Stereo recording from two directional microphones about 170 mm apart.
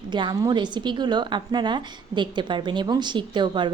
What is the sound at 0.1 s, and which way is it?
A woman's voice, 25° right (ahead or behind).